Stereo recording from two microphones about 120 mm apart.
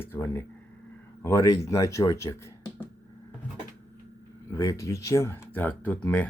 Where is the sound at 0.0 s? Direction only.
15° left (ahead or behind).